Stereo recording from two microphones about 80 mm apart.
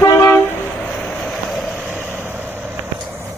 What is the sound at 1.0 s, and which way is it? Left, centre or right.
Vehicle, centre.